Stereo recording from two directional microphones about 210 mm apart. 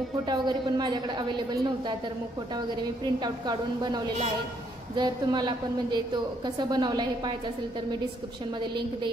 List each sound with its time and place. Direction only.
0.2 s a woman's voice: 20° right (ahead or behind)
8.5 s a woman's voice: 20° right (ahead or behind)